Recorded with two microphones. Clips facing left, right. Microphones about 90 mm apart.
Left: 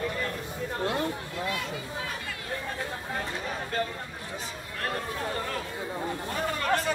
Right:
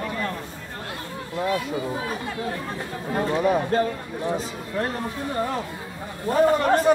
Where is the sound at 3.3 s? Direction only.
55° right (ahead or behind).